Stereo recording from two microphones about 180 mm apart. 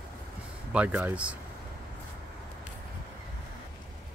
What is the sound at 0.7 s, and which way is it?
Speech, 5° right (ahead or behind).